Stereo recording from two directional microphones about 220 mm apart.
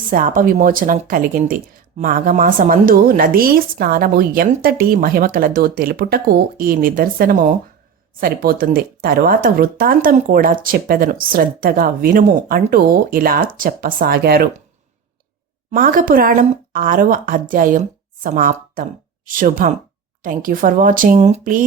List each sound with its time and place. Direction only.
0.1 s speech: 40° right (ahead or behind)
15.7 s speech: 40° right (ahead or behind)